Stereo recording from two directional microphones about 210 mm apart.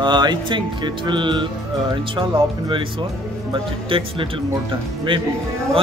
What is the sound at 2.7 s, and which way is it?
Speech, 25° right (ahead or behind).